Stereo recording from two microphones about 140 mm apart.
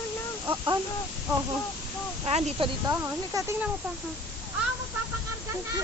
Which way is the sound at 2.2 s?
45° right (ahead or behind).